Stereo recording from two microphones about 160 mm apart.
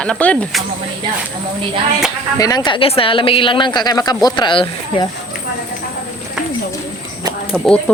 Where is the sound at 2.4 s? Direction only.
25° left (ahead or behind).